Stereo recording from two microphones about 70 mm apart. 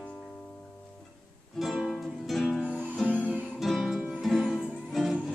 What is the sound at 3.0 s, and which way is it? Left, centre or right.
Music, centre.